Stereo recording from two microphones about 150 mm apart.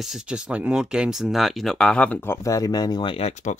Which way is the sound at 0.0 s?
5° right (ahead or behind).